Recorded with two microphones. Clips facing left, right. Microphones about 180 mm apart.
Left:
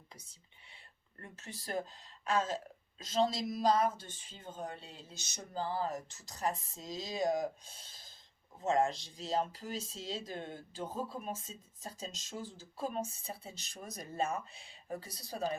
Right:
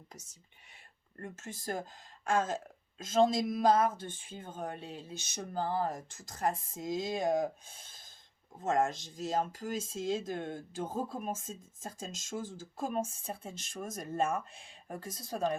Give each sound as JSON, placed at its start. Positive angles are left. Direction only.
{"t": 0.1, "sound": "speech", "side_deg": -45}